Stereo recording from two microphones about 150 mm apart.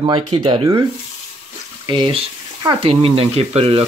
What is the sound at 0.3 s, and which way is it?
Speech, 35° right (ahead or behind).